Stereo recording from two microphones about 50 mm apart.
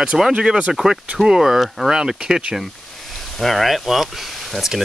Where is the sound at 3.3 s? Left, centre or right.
Centre.